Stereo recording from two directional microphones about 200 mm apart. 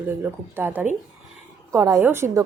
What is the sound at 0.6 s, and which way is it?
A woman's voice, 10° right (ahead or behind).